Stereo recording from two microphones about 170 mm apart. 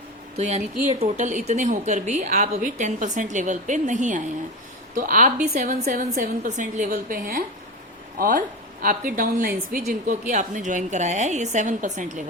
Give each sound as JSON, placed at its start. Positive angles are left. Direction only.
{"t": 0.3, "sound": "a woman's voice", "side_deg": -40}